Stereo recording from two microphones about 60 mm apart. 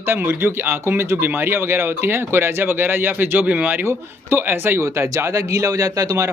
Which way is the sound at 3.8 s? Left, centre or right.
Right.